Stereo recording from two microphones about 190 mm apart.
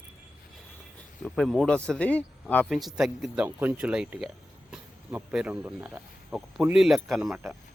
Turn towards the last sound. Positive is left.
turn(degrees=0)  # may be behind; listen again after turning